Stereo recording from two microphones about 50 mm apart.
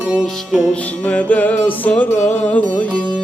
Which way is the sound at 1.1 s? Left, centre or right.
Left.